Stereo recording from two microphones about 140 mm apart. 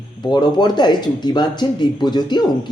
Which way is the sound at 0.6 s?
30° left (ahead or behind).